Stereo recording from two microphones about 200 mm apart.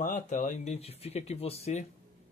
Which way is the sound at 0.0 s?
40° left (ahead or behind).